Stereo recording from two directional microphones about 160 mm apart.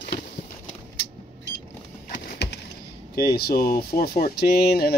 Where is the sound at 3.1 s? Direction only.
75° left (ahead or behind).